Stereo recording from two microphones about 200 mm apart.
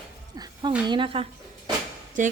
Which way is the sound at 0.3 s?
20° right (ahead or behind).